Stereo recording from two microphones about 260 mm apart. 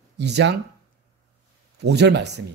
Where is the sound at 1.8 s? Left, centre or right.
Right.